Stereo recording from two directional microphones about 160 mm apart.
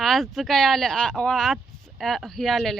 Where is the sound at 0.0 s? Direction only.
Centre (ahead or behind).